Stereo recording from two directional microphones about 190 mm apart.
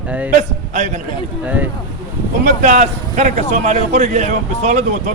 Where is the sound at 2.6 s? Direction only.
40° right (ahead or behind).